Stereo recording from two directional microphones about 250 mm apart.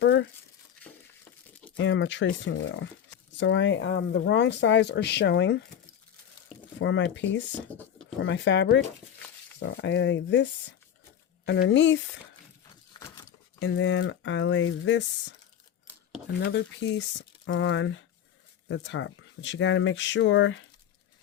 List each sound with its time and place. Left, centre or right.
0.0 s speech: left
1.7 s speech: left
6.7 s speech: left
7.7 s speech: centre
8.2 s speech: left
12.9 s a sound: centre
13.6 s speech: left
16.8 s speech: left